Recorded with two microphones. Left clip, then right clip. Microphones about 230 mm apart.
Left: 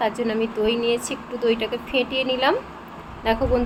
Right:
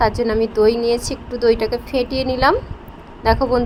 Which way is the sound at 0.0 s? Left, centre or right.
Right.